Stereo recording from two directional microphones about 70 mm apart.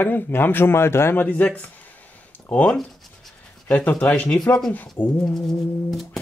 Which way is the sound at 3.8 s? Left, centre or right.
Left.